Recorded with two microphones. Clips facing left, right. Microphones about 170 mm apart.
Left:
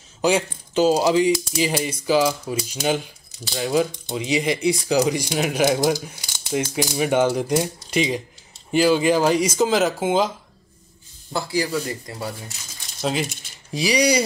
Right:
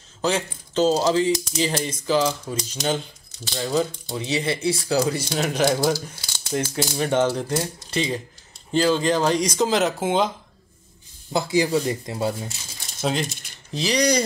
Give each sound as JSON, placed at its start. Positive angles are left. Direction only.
{"t": 0.2, "sound": "speech", "side_deg": 10}
{"t": 11.3, "sound": "speech", "side_deg": -20}
{"t": 13.0, "sound": "speech", "side_deg": 5}